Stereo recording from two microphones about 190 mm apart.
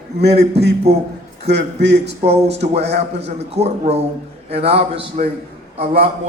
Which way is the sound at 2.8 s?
65° right (ahead or behind).